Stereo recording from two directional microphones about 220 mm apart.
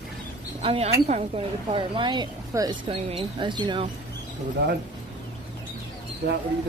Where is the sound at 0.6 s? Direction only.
25° right (ahead or behind).